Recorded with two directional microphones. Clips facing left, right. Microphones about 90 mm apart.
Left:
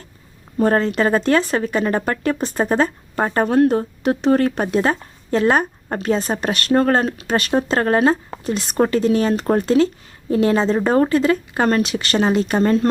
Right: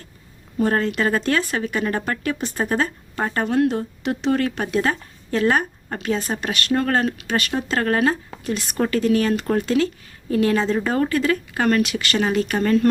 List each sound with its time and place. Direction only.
0.6 s speech: 35° left (ahead or behind)